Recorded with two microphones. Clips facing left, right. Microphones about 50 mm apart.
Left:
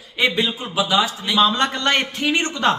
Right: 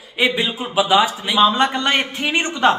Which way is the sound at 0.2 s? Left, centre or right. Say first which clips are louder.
Right 1 dB; centre.